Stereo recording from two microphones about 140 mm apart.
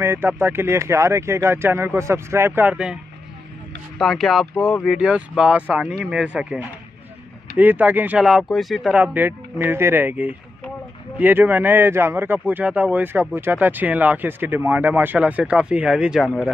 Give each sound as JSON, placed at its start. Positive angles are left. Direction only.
{"t": 0.0, "sound": "speech", "side_deg": -15}
{"t": 4.0, "sound": "speech", "side_deg": 0}
{"t": 8.9, "sound": "speech", "side_deg": -10}